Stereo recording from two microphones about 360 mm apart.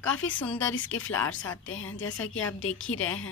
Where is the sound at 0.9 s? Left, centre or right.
Left.